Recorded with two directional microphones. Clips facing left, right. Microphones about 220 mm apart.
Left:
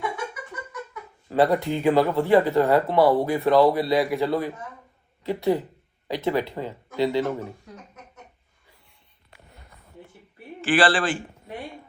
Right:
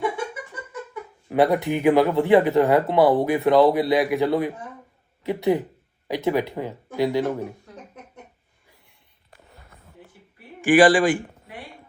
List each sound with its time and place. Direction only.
1.3 s speech: 20° right (ahead or behind)
9.3 s a sound: centre (ahead or behind)
10.6 s speech: 15° right (ahead or behind)